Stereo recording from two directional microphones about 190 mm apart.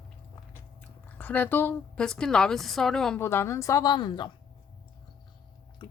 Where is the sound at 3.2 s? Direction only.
15° left (ahead or behind).